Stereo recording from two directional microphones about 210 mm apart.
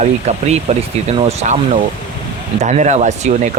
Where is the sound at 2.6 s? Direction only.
35° right (ahead or behind).